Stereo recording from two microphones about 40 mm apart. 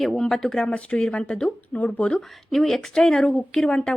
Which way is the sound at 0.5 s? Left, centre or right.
Left.